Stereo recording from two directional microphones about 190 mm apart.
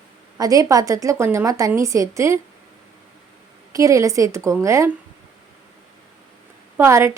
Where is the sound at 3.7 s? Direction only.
15° right (ahead or behind).